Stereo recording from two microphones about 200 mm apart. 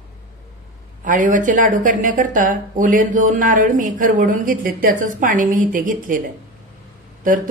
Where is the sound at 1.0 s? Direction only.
40° right (ahead or behind).